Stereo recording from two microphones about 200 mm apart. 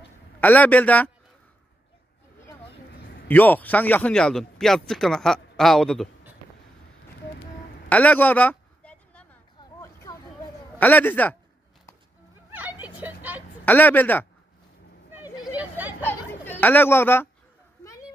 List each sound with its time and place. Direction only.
0.4 s a man's voice: 5° left (ahead or behind)
3.3 s speech: 10° left (ahead or behind)
7.9 s a sound: 10° left (ahead or behind)
9.6 s vehicle: 15° left (ahead or behind)
10.8 s a man's voice: 10° left (ahead or behind)
13.0 s vehicle: 10° right (ahead or behind)
13.7 s a man's voice: 10° left (ahead or behind)
15.5 s a sound: 10° right (ahead or behind)
16.4 s speech: 10° left (ahead or behind)